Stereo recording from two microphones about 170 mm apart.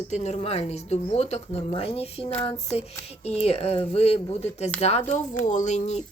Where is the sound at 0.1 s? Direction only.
40° left (ahead or behind).